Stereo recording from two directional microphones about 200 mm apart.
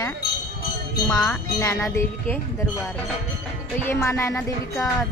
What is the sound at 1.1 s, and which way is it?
Speech, 5° left (ahead or behind).